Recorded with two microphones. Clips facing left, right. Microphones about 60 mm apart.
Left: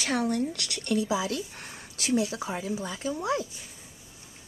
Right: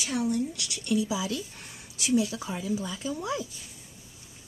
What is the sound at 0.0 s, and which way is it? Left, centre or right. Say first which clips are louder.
Rub: left 1 dB; left.